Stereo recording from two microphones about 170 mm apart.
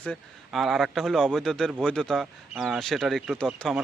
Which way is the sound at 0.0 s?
Centre (ahead or behind).